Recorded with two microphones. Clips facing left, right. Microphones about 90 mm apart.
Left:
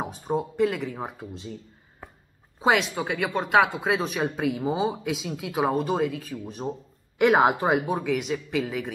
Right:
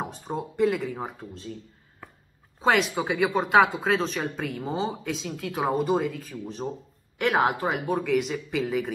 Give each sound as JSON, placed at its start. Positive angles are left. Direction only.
{"t": 0.0, "sound": "speech", "side_deg": 5}
{"t": 3.0, "sound": "speech", "side_deg": 0}
{"t": 8.0, "sound": "speech", "side_deg": 0}